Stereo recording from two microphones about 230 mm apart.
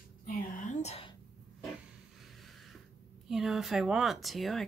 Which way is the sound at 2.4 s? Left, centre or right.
Centre.